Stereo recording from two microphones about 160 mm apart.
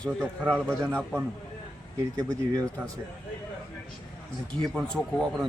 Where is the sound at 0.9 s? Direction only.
5° right (ahead or behind).